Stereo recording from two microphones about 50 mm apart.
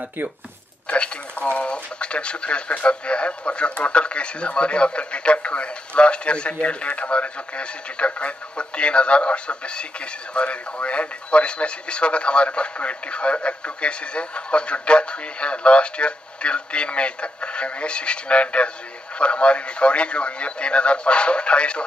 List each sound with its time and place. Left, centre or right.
0.8 s speech: left